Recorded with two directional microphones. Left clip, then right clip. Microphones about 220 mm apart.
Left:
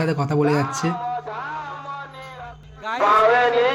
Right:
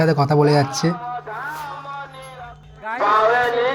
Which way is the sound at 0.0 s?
15° right (ahead or behind).